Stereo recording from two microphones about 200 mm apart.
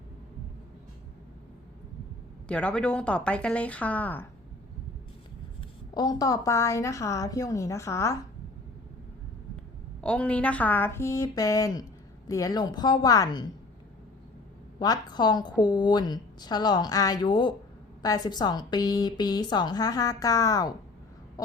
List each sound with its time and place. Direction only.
2.5 s a woman's voice: 5° left (ahead or behind)
5.5 s a woman's voice: 20° left (ahead or behind)
10.0 s a woman's voice: 5° left (ahead or behind)
14.8 s a woman's voice: 20° left (ahead or behind)